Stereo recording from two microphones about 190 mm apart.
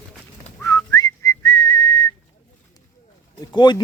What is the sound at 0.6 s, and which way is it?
Whistling, 15° left (ahead or behind).